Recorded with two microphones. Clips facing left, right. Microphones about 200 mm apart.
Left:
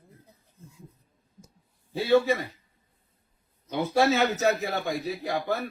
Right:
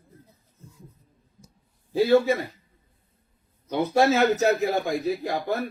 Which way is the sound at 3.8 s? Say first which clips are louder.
Right 3 dB; 35° right (ahead or behind).